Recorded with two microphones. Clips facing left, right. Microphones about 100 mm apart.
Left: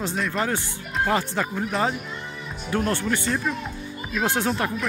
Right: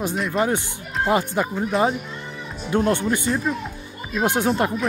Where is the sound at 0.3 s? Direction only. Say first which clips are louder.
Right 4 dB; 15° right (ahead or behind).